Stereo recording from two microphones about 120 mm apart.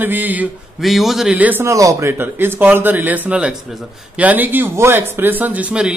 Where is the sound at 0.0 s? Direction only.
15° right (ahead or behind).